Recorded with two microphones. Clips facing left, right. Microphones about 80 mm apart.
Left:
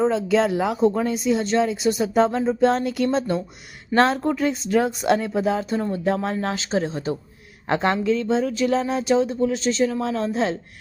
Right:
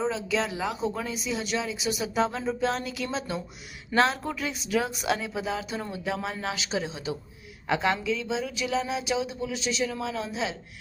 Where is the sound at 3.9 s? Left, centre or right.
Centre.